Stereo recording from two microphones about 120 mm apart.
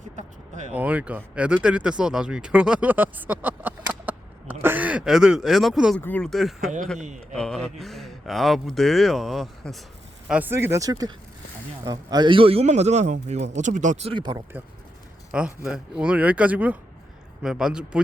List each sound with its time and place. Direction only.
0.2 s a sound: 80° right
0.7 s speech: 10° right (ahead or behind)
6.0 s speech: 15° left (ahead or behind)
6.2 s speech: centre (ahead or behind)
7.0 s speech: 90° right
7.3 s speech: 5° left (ahead or behind)
10.2 s speech: 10° right (ahead or behind)
10.5 s a man's voice: 20° right (ahead or behind); by 14.1 s 80° right
14.1 s speech: 40° right (ahead or behind)
15.3 s speech: 10° right (ahead or behind)